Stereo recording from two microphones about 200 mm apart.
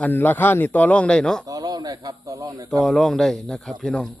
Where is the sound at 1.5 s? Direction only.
20° right (ahead or behind).